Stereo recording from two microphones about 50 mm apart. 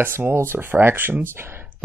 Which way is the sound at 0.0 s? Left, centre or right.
Right.